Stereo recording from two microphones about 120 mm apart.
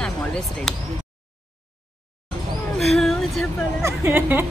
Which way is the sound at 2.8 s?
Centre (ahead or behind).